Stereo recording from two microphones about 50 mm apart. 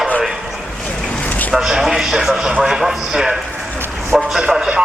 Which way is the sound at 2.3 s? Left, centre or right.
Centre.